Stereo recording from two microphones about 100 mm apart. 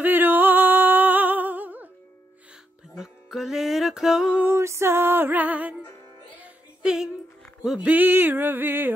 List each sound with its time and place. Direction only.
0.0 s music: 20° right (ahead or behind)
3.0 s music: 5° right (ahead or behind)
4.4 s music: 25° right (ahead or behind); by 7.9 s 5° right (ahead or behind)
7.9 s music: 20° right (ahead or behind)